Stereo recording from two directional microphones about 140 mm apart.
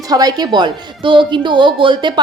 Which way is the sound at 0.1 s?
30° right (ahead or behind).